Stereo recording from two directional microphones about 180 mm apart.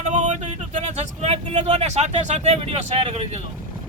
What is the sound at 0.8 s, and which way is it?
Speech, 35° right (ahead or behind).